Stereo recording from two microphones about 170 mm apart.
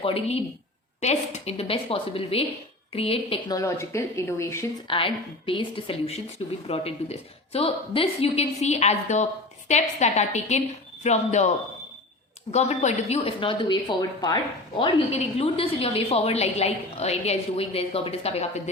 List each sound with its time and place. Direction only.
0.0 s a woman's voice: 35° left (ahead or behind)
3.5 s speech: 15° left (ahead or behind)
4.9 s a woman's voice: 30° left (ahead or behind)